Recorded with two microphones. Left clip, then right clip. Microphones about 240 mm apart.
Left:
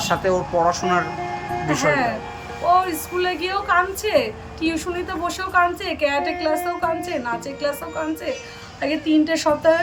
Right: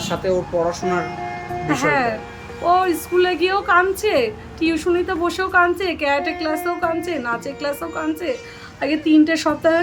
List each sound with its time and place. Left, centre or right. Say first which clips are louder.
0.1 s speech: even; centre
1.6 s a woman's voice: right 1 dB; centre